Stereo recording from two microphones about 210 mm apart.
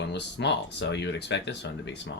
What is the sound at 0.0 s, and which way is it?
Speech, 55° left (ahead or behind).